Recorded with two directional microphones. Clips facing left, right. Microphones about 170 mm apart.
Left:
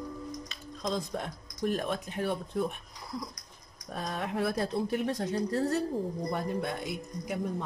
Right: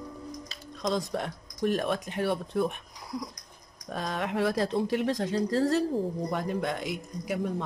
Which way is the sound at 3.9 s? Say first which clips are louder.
Right 3 dB; 90° right.